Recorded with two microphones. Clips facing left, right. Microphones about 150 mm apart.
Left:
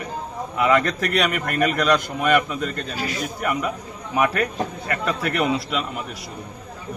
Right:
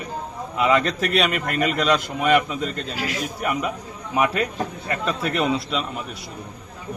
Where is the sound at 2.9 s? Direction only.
90° right.